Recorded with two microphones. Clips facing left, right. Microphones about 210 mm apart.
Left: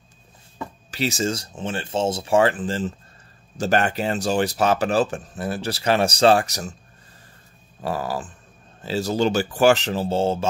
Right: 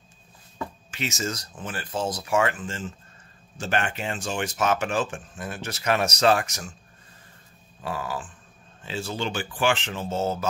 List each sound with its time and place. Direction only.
0.9 s speech: 35° left (ahead or behind)
7.8 s speech: 40° left (ahead or behind)